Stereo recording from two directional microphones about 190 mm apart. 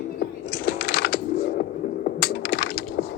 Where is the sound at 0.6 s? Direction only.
55° left (ahead or behind).